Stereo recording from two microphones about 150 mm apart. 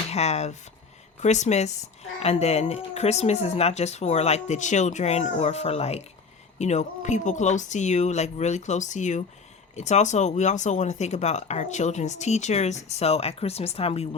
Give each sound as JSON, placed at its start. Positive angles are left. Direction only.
{"t": 0.1, "sound": "speech", "side_deg": 45}